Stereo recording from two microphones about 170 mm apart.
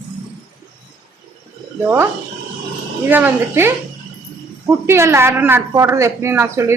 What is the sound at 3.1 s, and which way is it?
A woman's voice, 10° right (ahead or behind).